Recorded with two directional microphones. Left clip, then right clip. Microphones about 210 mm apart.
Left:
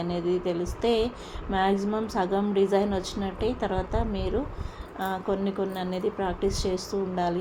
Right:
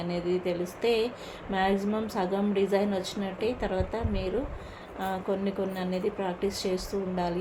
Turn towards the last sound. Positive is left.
turn(degrees=20)  # may be behind; listen again after turning